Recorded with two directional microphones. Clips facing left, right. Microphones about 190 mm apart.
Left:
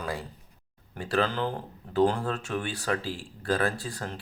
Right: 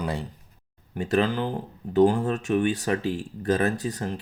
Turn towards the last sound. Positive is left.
turn(degrees=-20)  # may be behind; listen again after turning